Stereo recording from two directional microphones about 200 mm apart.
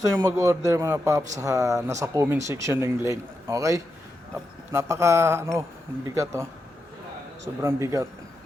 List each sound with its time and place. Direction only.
0.0 s speech: 15° right (ahead or behind)